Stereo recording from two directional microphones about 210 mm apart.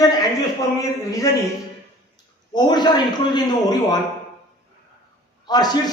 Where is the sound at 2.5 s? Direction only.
20° left (ahead or behind).